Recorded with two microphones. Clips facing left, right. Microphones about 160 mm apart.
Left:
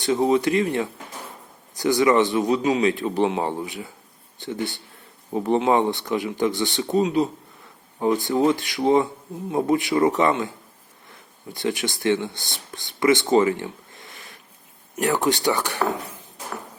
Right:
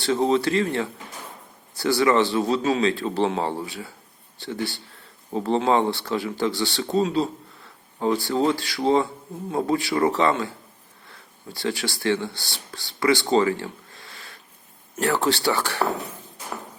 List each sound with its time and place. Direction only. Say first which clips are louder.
0.0 s speech: left 1 dB; 15° left (ahead or behind)
13.3 s a sound: left 2 dB; 20° left (ahead or behind)
14.9 s speech: left 1 dB; 15° left (ahead or behind)